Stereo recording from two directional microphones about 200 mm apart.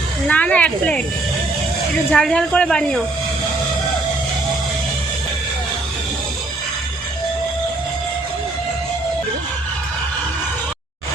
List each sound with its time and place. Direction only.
0.3 s speech: 5° left (ahead or behind)
2.1 s speech: 5° left (ahead or behind)